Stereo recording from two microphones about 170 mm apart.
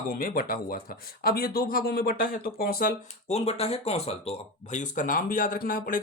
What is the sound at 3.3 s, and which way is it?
Speech, 40° left (ahead or behind).